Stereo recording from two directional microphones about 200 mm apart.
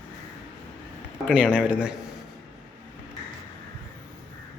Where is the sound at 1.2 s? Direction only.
5° right (ahead or behind).